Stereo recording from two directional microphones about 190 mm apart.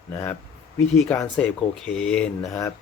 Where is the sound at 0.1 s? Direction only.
15° left (ahead or behind).